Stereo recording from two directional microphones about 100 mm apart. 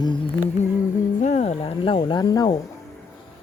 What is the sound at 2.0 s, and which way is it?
Speech, 45° left (ahead or behind).